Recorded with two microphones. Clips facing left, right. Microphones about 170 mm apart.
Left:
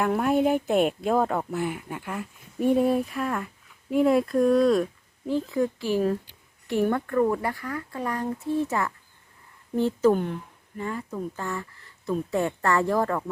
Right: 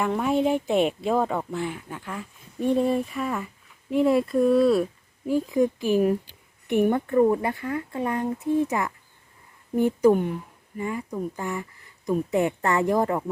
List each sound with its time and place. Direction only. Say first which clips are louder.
0.0 s a woman's voice: left 1 dB; centre (ahead or behind); by 13.2 s 20° right (ahead or behind)